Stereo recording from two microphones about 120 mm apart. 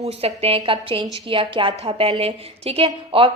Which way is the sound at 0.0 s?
60° right (ahead or behind).